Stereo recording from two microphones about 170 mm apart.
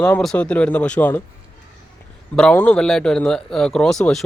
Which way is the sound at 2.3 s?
5° left (ahead or behind).